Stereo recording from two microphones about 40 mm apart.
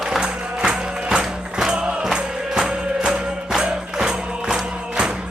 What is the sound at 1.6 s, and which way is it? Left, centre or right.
Music, right.